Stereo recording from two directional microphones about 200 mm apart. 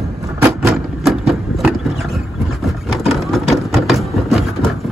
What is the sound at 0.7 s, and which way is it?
Vehicle, centre (ahead or behind).